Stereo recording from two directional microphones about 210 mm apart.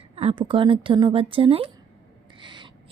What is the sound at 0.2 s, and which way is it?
A woman's voice, 25° right (ahead or behind).